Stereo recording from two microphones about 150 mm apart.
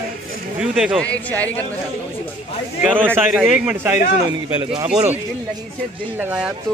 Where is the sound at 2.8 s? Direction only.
10° right (ahead or behind).